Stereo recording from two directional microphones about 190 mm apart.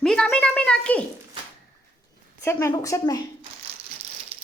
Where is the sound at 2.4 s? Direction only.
15° left (ahead or behind).